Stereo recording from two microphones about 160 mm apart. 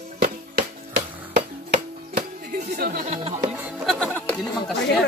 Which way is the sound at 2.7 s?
65° right (ahead or behind).